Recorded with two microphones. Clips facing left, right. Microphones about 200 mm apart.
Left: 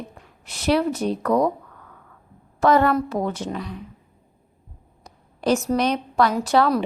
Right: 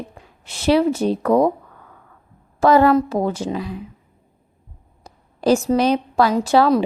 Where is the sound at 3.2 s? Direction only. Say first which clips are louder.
Right 4 dB; 30° right (ahead or behind).